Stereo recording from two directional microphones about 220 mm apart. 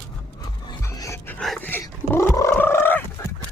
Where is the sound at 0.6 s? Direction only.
15° left (ahead or behind).